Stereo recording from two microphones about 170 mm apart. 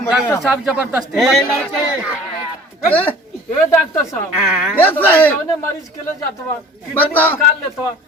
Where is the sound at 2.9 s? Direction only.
10° left (ahead or behind).